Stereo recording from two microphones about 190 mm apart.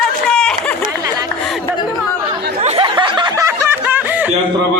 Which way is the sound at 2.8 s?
25° right (ahead or behind).